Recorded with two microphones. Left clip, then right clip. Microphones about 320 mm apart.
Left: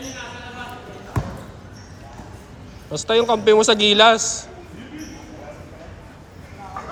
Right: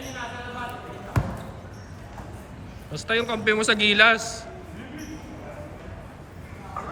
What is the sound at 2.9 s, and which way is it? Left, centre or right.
A man's voice, centre.